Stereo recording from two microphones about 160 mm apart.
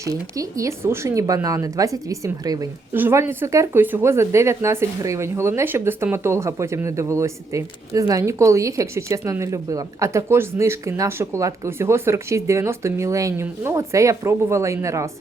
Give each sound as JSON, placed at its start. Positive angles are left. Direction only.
{"t": 0.0, "sound": "speech", "side_deg": -20}